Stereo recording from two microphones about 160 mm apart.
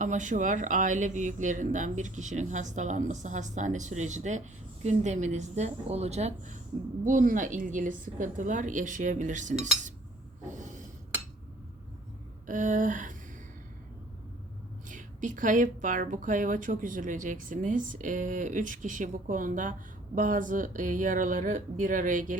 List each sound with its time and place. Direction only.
0.0 s speech: 50° right (ahead or behind)
10.4 s a sound: 50° right (ahead or behind)
12.5 s speech: 55° right (ahead or behind)
14.8 s speech: 55° right (ahead or behind)